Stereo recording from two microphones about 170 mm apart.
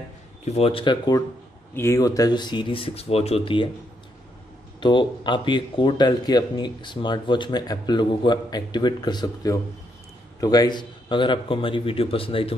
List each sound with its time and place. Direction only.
0.5 s a man's voice: 35° left (ahead or behind)
1.7 s speech: 15° left (ahead or behind); by 3.7 s 30° left (ahead or behind)
4.7 s a man's voice: 25° left (ahead or behind)